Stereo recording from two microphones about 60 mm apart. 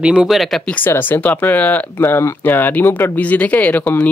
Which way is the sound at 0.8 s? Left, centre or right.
Left.